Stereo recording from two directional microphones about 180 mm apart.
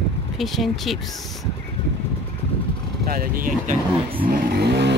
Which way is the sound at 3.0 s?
50° right (ahead or behind).